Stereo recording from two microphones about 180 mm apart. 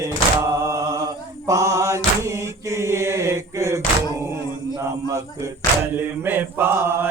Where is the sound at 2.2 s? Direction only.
15° right (ahead or behind).